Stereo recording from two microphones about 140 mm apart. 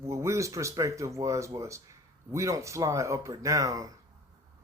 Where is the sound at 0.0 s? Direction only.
20° right (ahead or behind).